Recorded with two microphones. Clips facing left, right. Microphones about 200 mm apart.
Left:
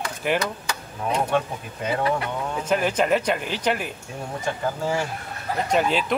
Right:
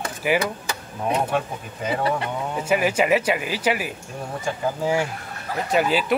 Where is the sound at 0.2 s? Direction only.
5° right (ahead or behind).